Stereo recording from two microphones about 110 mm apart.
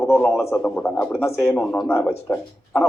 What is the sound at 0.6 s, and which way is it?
Speech, 10° left (ahead or behind).